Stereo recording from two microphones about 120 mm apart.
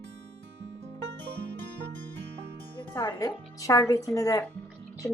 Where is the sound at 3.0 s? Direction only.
30° left (ahead or behind).